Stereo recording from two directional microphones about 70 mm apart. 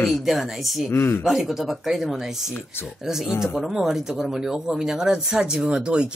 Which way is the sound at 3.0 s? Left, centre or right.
Centre.